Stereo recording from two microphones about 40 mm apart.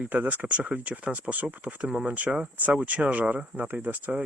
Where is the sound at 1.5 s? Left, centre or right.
Right.